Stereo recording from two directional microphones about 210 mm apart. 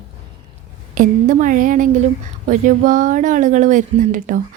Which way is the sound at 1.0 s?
40° right (ahead or behind).